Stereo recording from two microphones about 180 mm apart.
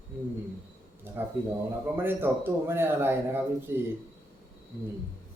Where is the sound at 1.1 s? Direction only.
10° right (ahead or behind).